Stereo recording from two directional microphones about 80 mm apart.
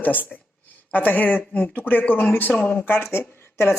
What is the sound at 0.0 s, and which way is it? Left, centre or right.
A woman's voice, left.